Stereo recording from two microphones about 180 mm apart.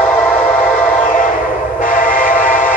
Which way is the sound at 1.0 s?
45° left (ahead or behind).